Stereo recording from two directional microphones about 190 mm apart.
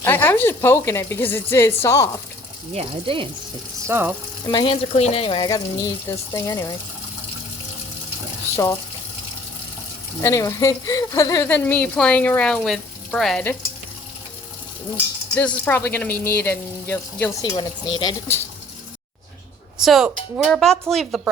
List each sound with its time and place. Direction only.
0.0 s speech: 10° left (ahead or behind)
2.7 s speech: 30° right (ahead or behind)
3.8 s frying: 10° right (ahead or behind)
4.4 s speech: 25° left (ahead or behind)
10.2 s speech: 15° left (ahead or behind)
15.4 s speech: 10° left (ahead or behind)
17.4 s speech: 25° left (ahead or behind)
19.8 s speech: centre (ahead or behind)